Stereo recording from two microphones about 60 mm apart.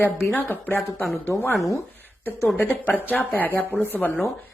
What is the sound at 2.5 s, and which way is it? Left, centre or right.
A woman's voice, left.